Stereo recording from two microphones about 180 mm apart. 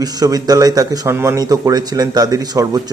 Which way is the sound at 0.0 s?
20° right (ahead or behind).